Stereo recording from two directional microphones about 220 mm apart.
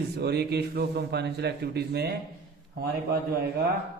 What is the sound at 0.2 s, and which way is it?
A man's voice, 50° right (ahead or behind).